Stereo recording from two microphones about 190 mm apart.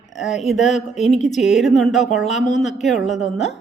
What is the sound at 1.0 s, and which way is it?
Speech, 35° left (ahead or behind).